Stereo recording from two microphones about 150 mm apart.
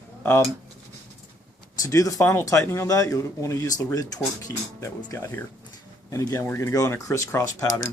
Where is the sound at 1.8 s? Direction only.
20° left (ahead or behind).